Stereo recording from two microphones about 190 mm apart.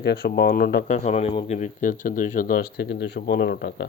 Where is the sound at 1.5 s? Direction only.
45° left (ahead or behind); by 3.8 s 65° left (ahead or behind).